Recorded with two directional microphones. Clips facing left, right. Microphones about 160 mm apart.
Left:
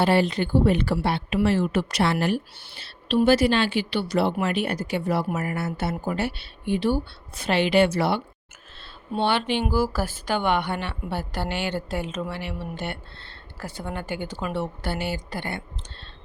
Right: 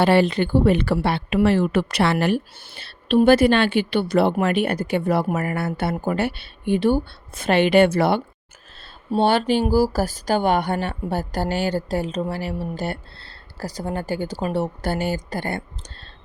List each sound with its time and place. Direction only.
0.0 s a woman's voice: 65° right (ahead or behind); by 8.2 s 50° right (ahead or behind)
9.1 s speech: 40° right (ahead or behind)